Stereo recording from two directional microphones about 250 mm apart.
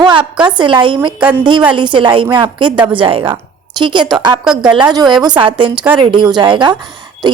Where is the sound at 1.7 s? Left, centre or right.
Centre.